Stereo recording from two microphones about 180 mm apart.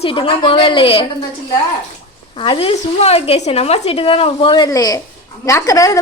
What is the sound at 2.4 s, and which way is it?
A woman's voice, 30° left (ahead or behind).